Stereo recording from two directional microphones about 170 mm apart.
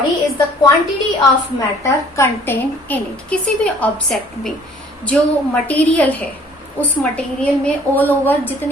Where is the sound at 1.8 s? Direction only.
15° left (ahead or behind).